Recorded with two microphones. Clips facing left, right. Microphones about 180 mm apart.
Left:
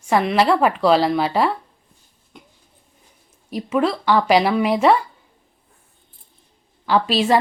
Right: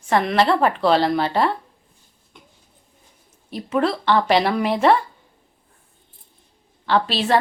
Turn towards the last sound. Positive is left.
turn(degrees=5)  # may be behind; listen again after turning